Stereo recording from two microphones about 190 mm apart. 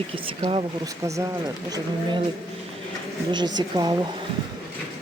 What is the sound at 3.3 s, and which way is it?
Speech, 25° right (ahead or behind).